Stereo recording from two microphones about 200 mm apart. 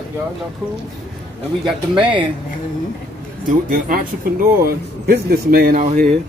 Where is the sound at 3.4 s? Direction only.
45° right (ahead or behind).